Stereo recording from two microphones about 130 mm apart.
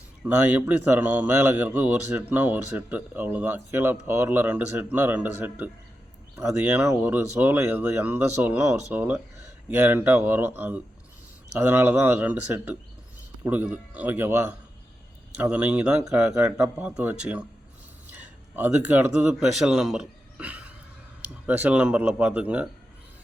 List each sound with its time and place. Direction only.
0.4 s speech: 15° right (ahead or behind)
16.6 s speech: 5° right (ahead or behind)
19.4 s speech: 5° right (ahead or behind)